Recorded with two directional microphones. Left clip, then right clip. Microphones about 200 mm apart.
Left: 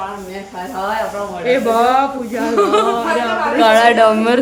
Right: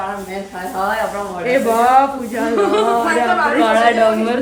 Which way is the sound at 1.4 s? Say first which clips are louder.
Even; 5° left (ahead or behind).